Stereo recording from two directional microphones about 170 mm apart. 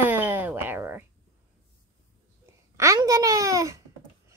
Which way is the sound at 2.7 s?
20° right (ahead or behind).